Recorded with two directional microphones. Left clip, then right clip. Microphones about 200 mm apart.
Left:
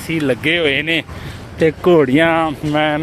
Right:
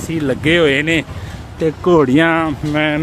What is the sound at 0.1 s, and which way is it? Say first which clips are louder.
Speech: right 1 dB; 5° right (ahead or behind).